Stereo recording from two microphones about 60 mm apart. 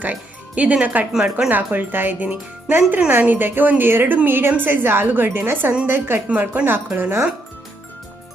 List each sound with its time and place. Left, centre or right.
0.0 s speech: right
1.1 s speech: centre
1.5 s a woman's voice: right
6.2 s a woman's voice: right